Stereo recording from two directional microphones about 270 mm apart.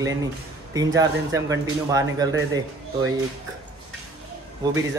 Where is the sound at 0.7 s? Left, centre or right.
Centre.